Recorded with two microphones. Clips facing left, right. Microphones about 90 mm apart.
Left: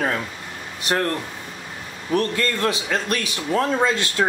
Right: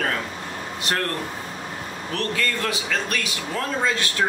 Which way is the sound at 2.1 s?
20° left (ahead or behind).